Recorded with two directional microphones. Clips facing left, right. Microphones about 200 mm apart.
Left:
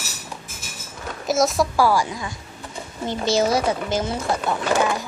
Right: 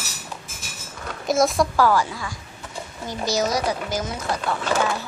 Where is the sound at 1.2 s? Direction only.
Centre (ahead or behind); by 4.6 s 25° left (ahead or behind).